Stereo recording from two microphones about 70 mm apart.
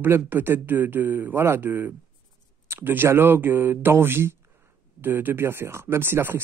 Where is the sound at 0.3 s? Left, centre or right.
Right.